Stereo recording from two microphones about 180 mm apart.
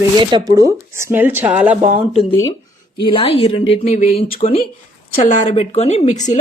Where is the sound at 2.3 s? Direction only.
15° left (ahead or behind).